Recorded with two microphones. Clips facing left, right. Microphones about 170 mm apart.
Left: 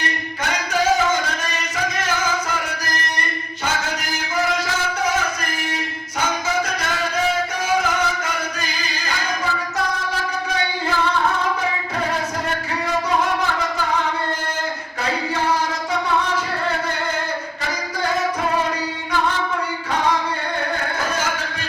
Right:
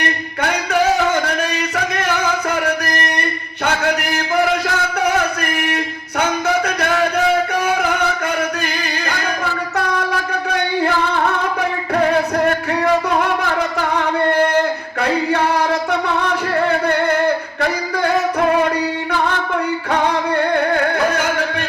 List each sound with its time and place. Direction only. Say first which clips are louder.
0.7 s music: right 2 dB; 65° right (ahead or behind)
8.6 s music: right 6 dB; 65° right (ahead or behind)
14.3 s singing: right 12 dB; 65° right (ahead or behind)
15.0 s music: right 5 dB; 65° right (ahead or behind)